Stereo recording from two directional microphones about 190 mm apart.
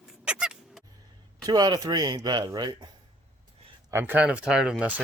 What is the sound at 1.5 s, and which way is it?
Speech, 20° right (ahead or behind).